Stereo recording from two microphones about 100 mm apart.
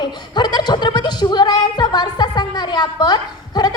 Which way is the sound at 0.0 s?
45° left (ahead or behind).